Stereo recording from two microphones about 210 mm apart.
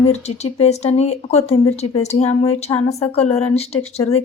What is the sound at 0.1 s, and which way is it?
Speech, 30° left (ahead or behind).